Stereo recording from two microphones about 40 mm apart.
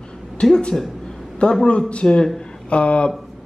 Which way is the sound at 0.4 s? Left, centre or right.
Left.